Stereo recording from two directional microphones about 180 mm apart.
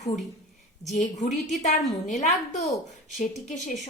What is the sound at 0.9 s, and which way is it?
A woman's voice, 40° left (ahead or behind).